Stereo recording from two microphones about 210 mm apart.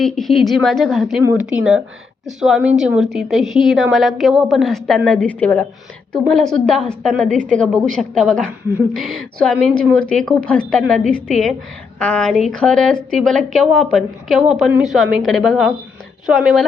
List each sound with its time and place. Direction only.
0.0 s a woman's voice: centre (ahead or behind)
7.3 s a woman's voice: 40° right (ahead or behind)
7.5 s a woman's voice: 5° left (ahead or behind)